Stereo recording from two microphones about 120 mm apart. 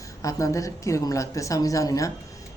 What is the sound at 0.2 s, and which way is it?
A woman's voice, 25° left (ahead or behind).